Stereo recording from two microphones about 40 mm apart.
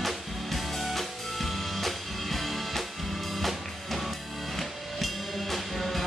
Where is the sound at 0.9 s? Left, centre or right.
Centre.